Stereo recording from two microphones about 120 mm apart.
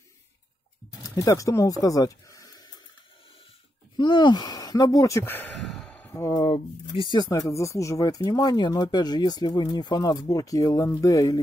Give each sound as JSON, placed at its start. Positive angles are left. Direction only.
{"t": 1.1, "sound": "speech", "side_deg": 30}
{"t": 3.9, "sound": "speech", "side_deg": 40}
{"t": 5.6, "sound": "a sound", "side_deg": 0}
{"t": 5.9, "sound": "a sound", "side_deg": 15}
{"t": 6.4, "sound": "speech", "side_deg": 50}
{"t": 7.2, "sound": "speech", "side_deg": 25}